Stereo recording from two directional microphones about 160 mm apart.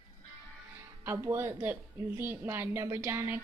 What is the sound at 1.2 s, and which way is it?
A woman's voice, 15° right (ahead or behind).